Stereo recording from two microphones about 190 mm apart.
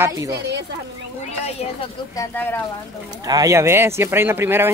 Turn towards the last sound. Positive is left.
turn(degrees=-10)  # may be behind; listen again after turning